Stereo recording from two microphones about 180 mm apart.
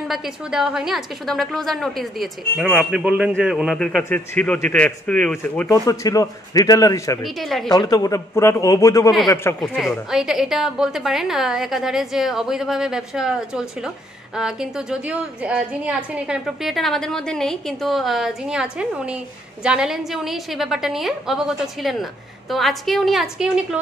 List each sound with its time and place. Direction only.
0.1 s a woman's voice: centre (ahead or behind)
5.7 s a man's voice: 20° left (ahead or behind)
7.2 s a woman's voice: centre (ahead or behind)
7.7 s a man's voice: 20° left (ahead or behind)
9.6 s a woman's voice: centre (ahead or behind)